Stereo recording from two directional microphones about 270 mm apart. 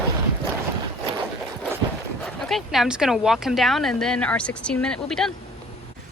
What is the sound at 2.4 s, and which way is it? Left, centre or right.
Speech, centre.